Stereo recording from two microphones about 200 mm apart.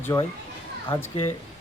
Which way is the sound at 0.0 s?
15° left (ahead or behind).